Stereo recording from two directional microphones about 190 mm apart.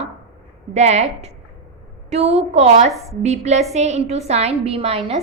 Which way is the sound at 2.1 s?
35° right (ahead or behind).